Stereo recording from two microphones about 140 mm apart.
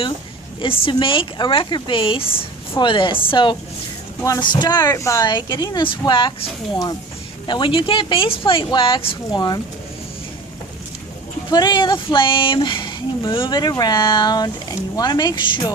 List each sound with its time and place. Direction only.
0.6 s speech: 35° left (ahead or behind)
7.4 s speech: 35° left (ahead or behind)
11.5 s speech: 30° left (ahead or behind)